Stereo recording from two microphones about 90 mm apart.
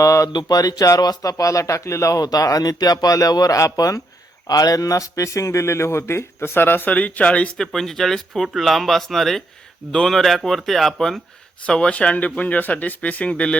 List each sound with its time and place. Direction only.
0.0 s speech: 35° left (ahead or behind); by 13.6 s 10° left (ahead or behind)